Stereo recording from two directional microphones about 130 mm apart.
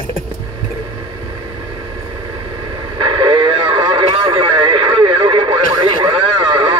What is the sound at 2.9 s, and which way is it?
Radio, 40° right (ahead or behind).